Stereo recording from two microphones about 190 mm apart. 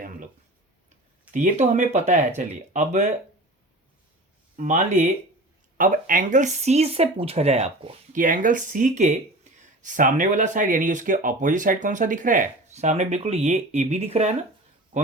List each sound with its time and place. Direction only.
1.3 s speech: 40° right (ahead or behind)
4.5 s speech: 40° right (ahead or behind)